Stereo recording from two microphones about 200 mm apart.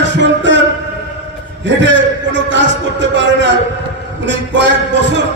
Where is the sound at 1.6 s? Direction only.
65° right (ahead or behind).